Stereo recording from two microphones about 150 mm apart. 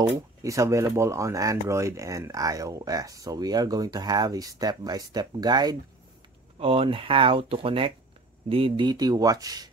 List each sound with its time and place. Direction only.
0.4 s speech: 20° right (ahead or behind)
6.6 s speech: 40° right (ahead or behind)